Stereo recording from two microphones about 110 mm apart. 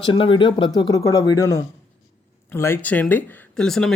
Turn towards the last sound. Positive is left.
turn(degrees=5)  # may be behind; listen again after turning